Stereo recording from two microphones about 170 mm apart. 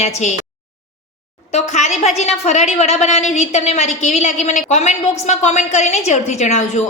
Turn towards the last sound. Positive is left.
turn(degrees=40)  # may be behind; listen again after turning